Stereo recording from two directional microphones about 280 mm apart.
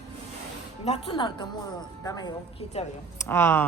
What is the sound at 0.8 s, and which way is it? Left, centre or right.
A woman's voice, centre.